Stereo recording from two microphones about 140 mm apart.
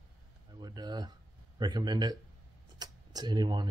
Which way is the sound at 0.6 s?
30° right (ahead or behind).